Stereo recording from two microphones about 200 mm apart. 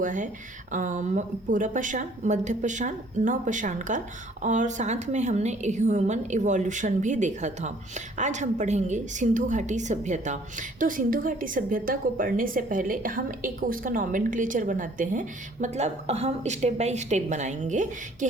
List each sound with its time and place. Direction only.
0.0 s a woman's voice: 40° right (ahead or behind)